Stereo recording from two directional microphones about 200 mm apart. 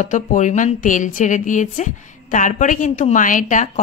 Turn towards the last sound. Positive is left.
turn(degrees=40)  # may be behind; listen again after turning